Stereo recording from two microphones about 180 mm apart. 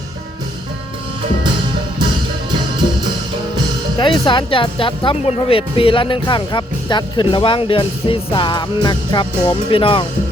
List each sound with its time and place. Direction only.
4.0 s speech: 25° left (ahead or behind)